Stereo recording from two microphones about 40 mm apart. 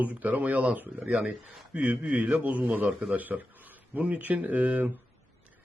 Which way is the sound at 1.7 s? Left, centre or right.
Right.